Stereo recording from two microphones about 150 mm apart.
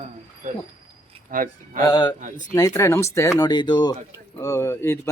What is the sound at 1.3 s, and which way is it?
Speech, 65° right (ahead or behind).